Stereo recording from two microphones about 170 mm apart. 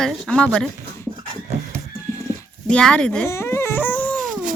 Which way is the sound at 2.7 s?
5° left (ahead or behind).